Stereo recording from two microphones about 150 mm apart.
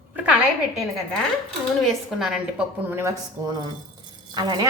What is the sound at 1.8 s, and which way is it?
Speech, 5° right (ahead or behind).